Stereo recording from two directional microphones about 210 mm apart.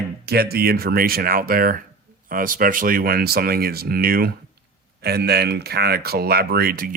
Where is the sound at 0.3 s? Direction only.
50° right (ahead or behind).